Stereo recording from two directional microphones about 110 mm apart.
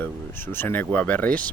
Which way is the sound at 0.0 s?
20° left (ahead or behind).